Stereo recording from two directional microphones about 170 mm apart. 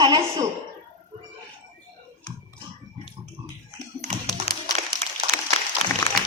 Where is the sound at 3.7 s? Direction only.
40° right (ahead or behind).